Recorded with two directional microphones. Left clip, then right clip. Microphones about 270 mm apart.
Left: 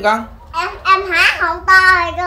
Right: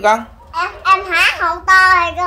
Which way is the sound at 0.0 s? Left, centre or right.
Centre.